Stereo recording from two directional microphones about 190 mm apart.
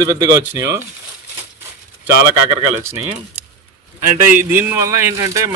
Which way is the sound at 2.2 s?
20° right (ahead or behind).